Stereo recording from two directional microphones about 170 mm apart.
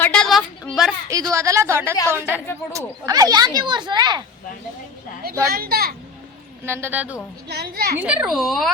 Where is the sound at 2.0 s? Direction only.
15° left (ahead or behind).